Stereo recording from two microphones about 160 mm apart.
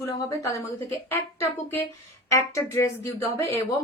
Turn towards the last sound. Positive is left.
turn(degrees=15)  # may be behind; listen again after turning